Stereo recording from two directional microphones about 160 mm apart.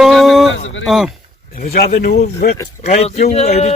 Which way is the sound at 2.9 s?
45° left (ahead or behind).